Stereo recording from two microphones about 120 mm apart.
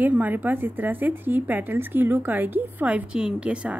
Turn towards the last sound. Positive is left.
turn(degrees=-10)  # may be behind; listen again after turning